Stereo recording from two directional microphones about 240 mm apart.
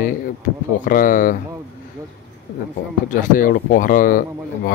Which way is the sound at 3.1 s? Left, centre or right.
Left.